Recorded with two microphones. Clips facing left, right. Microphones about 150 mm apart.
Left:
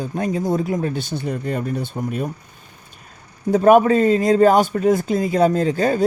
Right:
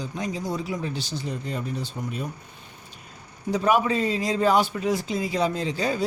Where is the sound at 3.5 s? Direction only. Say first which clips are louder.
Left 9 dB; 50° left (ahead or behind).